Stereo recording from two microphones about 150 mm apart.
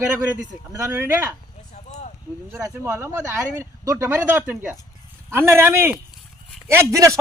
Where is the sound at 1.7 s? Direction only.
55° left (ahead or behind).